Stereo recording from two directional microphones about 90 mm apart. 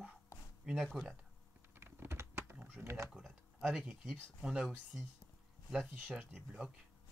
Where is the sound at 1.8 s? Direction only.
25° right (ahead or behind).